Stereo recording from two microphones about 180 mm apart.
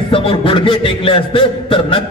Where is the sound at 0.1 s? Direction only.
30° left (ahead or behind).